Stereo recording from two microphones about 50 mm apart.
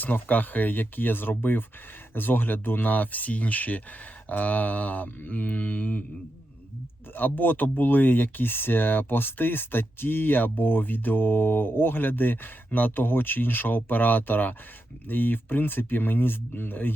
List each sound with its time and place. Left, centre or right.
0.0 s speech: left
7.1 s speech: left